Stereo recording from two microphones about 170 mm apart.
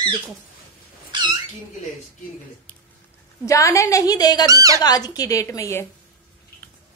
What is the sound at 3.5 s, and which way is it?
A woman's voice, 20° left (ahead or behind).